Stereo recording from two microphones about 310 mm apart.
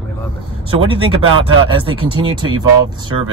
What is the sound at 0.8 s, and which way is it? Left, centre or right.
Speech, centre.